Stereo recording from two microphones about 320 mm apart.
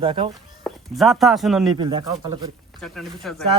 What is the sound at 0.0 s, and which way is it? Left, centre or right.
Speech, centre.